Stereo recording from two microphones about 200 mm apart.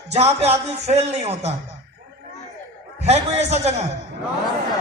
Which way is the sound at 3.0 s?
35° right (ahead or behind).